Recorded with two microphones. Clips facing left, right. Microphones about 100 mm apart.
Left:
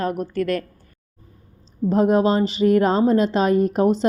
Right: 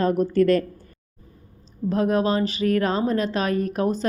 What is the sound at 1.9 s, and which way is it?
A woman's voice, 20° left (ahead or behind).